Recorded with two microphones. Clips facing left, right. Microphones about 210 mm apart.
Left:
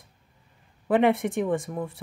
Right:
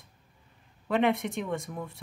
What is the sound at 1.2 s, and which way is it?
Speech, 50° left (ahead or behind).